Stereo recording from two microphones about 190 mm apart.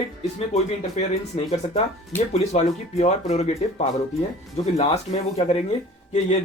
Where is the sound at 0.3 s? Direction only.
35° left (ahead or behind).